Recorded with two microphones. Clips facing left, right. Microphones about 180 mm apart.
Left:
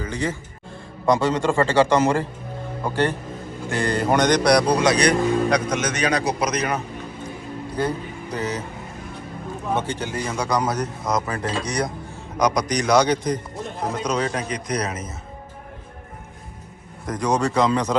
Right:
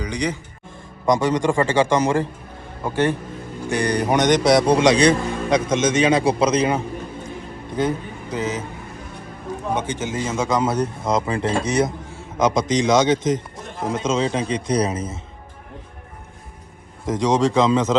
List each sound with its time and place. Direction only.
0.0 s a man's voice: 15° right (ahead or behind)
9.7 s speech: 20° right (ahead or behind)
17.1 s speech: 20° right (ahead or behind)